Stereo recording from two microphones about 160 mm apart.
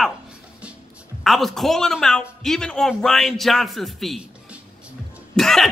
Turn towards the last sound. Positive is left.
turn(degrees=0)  # may be behind; listen again after turning